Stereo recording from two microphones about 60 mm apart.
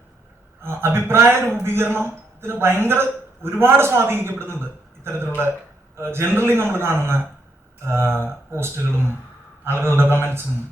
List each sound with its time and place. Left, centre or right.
0.6 s a man's voice: right